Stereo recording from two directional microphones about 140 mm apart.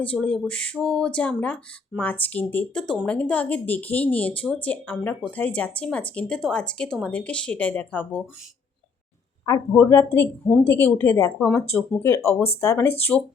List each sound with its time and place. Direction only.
0.0 s a woman's voice: 10° left (ahead or behind)
9.5 s a woman's voice: 20° left (ahead or behind)
11.3 s speech: 5° left (ahead or behind)
11.9 s speech: 20° left (ahead or behind)